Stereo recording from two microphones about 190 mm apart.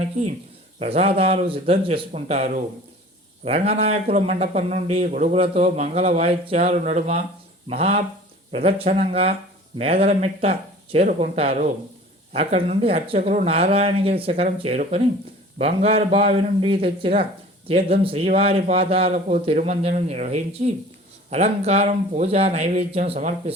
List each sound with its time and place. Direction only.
0.8 s speech: 30° right (ahead or behind)